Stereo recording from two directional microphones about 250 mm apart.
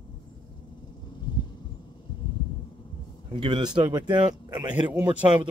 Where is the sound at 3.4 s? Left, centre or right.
Centre.